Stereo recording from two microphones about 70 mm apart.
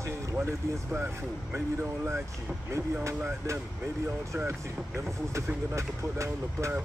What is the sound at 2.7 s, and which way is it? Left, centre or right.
Speech, right.